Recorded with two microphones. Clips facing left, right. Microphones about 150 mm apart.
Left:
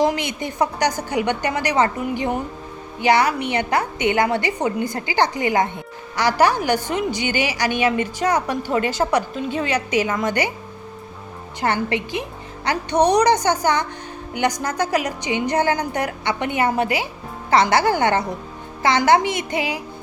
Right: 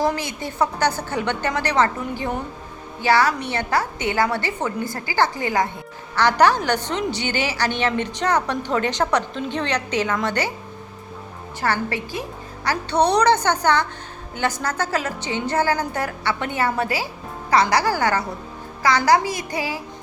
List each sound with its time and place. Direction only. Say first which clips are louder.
0.0 s a woman's voice: left 3 dB; 20° left (ahead or behind)
11.6 s a woman's voice: left 2 dB; 20° left (ahead or behind)